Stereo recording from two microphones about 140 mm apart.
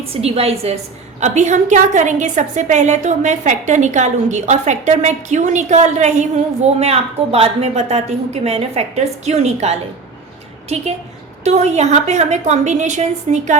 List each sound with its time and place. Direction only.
0.0 s a woman's voice: 45° right (ahead or behind)
1.2 s a woman's voice: 60° right (ahead or behind)
11.4 s a woman's voice: 55° right (ahead or behind)